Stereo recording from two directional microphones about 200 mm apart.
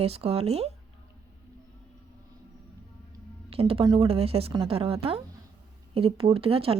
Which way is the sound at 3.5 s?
30° right (ahead or behind).